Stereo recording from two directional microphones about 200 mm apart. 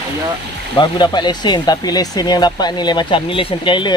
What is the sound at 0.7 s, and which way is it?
Speech, 20° left (ahead or behind).